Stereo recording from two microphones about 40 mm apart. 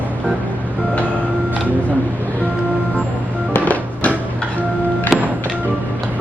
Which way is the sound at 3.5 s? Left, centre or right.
Left.